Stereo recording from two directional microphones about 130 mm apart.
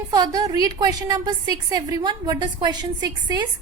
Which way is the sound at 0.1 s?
30° right (ahead or behind).